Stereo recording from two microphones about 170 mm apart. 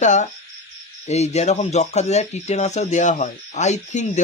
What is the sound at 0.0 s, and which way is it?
Speech, 45° left (ahead or behind).